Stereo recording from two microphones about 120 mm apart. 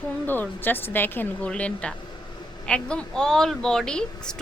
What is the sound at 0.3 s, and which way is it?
A woman's voice, 15° left (ahead or behind).